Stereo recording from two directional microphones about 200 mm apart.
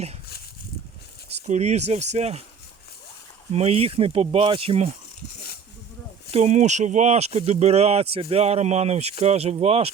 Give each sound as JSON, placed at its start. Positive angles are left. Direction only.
{"t": 1.3, "sound": "speech", "side_deg": -35}
{"t": 3.5, "sound": "speech", "side_deg": -30}
{"t": 6.3, "sound": "speech", "side_deg": -35}